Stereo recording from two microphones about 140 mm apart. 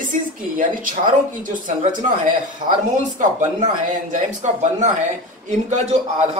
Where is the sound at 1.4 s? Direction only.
65° right (ahead or behind).